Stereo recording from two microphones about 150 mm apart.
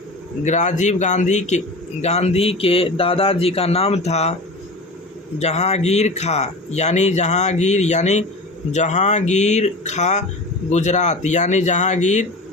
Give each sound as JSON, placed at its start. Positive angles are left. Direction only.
{"t": 0.4, "sound": "a man's voice", "side_deg": 55}
{"t": 5.4, "sound": "a man's voice", "side_deg": 45}